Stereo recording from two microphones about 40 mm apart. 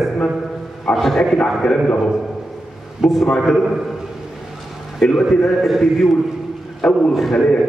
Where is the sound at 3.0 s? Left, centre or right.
Centre.